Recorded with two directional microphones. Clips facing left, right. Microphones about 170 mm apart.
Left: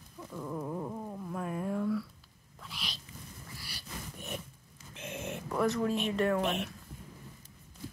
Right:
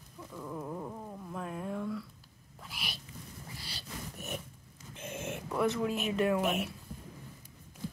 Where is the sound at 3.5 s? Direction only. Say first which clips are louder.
Right 1 dB; 25° right (ahead or behind).